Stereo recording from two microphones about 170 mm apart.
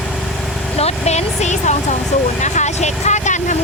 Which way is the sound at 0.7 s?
40° left (ahead or behind).